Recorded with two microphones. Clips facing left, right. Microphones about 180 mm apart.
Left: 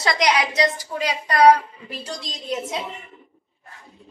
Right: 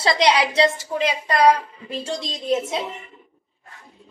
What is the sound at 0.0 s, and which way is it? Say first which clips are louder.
A woman's voice: right 2 dB; 30° right (ahead or behind).